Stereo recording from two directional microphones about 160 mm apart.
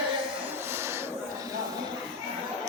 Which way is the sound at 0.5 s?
15° right (ahead or behind).